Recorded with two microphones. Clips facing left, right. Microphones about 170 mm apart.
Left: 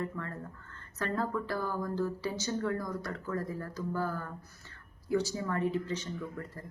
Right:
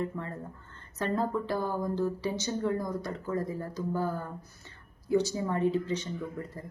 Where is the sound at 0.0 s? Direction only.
20° right (ahead or behind).